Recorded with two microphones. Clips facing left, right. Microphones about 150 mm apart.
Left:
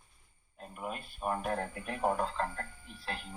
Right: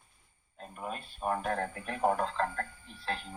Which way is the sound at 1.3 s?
20° left (ahead or behind).